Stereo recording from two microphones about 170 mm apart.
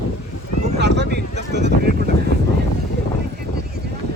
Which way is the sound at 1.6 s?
90° right.